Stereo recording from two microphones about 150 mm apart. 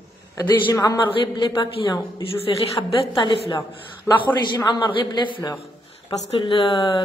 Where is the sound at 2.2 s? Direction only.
40° left (ahead or behind).